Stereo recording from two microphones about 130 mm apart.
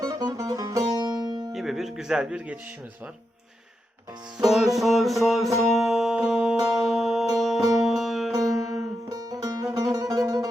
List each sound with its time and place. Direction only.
0.0 s music: 30° right (ahead or behind)
1.5 s music: centre (ahead or behind)
4.4 s music: centre (ahead or behind)
9.0 s music: 30° right (ahead or behind)